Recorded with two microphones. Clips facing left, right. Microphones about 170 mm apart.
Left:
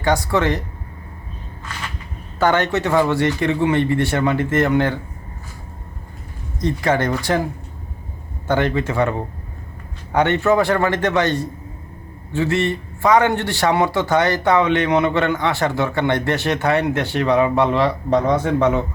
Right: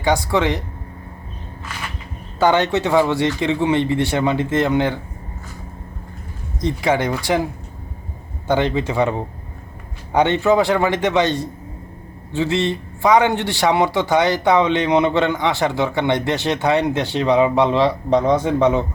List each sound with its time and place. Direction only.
0.0 s a man's voice: 15° right (ahead or behind)
2.4 s a man's voice: 15° right (ahead or behind)
6.7 s a man's voice: 10° right (ahead or behind)
8.4 s a man's voice: 20° right (ahead or behind)